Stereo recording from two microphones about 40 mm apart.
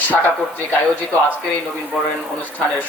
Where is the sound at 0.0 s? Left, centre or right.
Left.